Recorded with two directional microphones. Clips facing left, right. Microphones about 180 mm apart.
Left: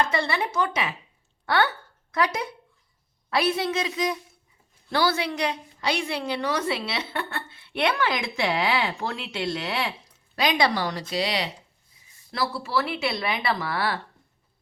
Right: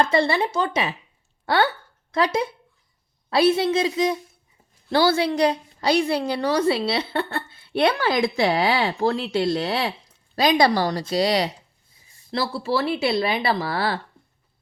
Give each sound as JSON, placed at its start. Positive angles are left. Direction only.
{"t": 0.0, "sound": "a woman's voice", "side_deg": -30}
{"t": 12.3, "sound": "speech", "side_deg": -30}